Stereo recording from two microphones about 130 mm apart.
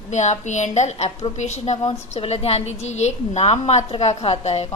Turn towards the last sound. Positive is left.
turn(degrees=55)  # may be behind; listen again after turning